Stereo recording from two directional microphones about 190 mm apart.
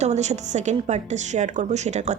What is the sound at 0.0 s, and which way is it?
A woman's voice, 35° right (ahead or behind).